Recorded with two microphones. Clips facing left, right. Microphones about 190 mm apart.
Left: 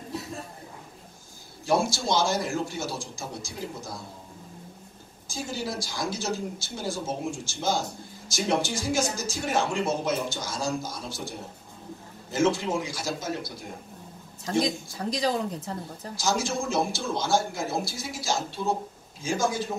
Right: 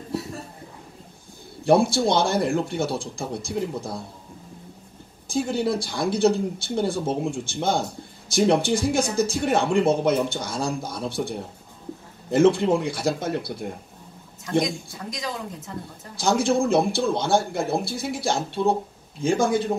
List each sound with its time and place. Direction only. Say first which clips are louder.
1.6 s speech: right 7 dB; 60° right (ahead or behind)
5.3 s speech: right 9 dB; 60° right (ahead or behind)
15.0 s speech: left 5 dB; 35° left (ahead or behind)
16.2 s speech: right 7 dB; 60° right (ahead or behind)